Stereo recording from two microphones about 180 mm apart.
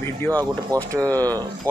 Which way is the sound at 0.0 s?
10° left (ahead or behind).